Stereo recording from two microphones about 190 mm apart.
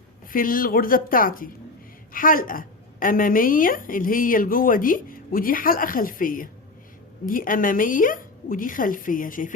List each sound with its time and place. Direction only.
0.3 s a woman's voice: 50° left (ahead or behind)